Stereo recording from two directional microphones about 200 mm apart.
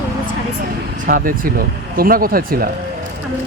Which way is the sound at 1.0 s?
45° right (ahead or behind).